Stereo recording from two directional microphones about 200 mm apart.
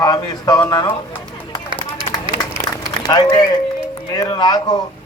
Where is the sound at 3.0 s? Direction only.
20° left (ahead or behind).